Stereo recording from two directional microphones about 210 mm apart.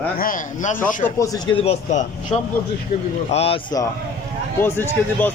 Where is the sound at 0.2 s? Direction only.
40° left (ahead or behind).